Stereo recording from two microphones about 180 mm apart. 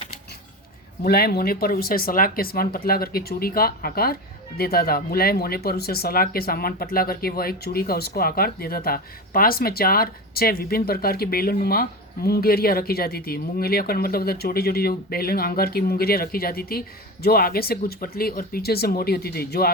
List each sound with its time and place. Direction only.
1.0 s speech: 60° left (ahead or behind)